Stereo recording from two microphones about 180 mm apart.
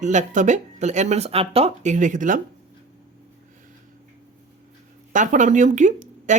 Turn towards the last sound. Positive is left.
turn(degrees=-40)  # may be behind; listen again after turning